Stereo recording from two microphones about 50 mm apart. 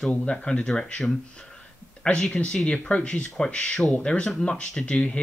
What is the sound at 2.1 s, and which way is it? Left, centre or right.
Speech, left.